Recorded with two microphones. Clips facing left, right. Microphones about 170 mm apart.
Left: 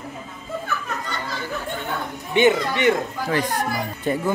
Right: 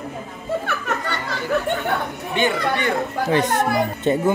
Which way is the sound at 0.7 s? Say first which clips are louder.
Right 4 dB; 70° right (ahead or behind).